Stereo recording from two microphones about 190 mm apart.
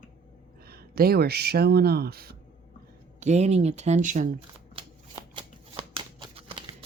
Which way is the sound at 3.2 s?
35° right (ahead or behind).